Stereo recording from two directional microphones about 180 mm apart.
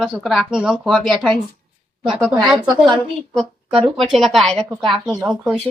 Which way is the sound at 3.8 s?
Centre (ahead or behind).